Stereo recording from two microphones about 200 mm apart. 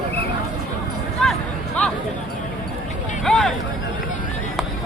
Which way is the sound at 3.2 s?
Centre (ahead or behind).